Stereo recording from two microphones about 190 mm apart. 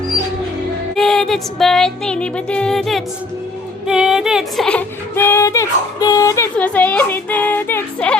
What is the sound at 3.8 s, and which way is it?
Female singing, 5° right (ahead or behind).